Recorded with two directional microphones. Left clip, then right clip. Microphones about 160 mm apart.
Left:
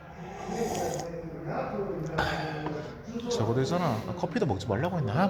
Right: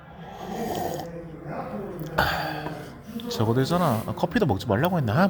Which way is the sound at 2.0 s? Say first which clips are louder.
Right 9 dB; 20° right (ahead or behind).